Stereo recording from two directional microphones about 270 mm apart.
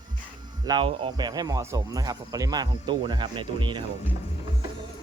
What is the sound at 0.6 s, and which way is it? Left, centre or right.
Speech, centre.